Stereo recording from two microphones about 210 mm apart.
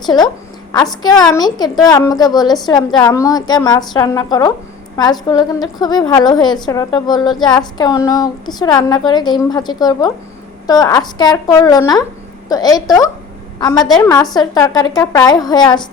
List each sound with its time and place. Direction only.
1.0 s a woman's voice: 20° left (ahead or behind)